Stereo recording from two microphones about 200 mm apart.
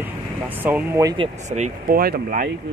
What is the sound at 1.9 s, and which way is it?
Speech, 45° right (ahead or behind).